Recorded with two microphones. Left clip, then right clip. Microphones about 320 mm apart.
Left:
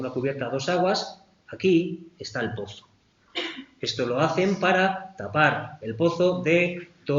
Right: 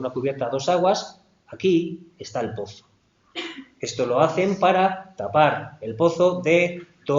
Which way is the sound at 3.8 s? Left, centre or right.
Centre.